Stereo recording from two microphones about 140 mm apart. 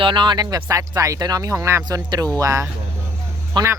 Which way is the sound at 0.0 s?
35° right (ahead or behind).